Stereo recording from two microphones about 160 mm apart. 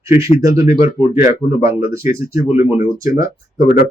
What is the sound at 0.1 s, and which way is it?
Speech, 20° right (ahead or behind).